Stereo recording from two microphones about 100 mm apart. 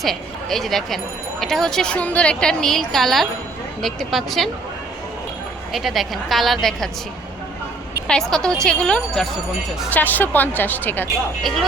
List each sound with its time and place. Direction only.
0.0 s a woman's voice: 5° left (ahead or behind)
5.7 s a woman's voice: centre (ahead or behind)
8.0 s speech: 5° left (ahead or behind)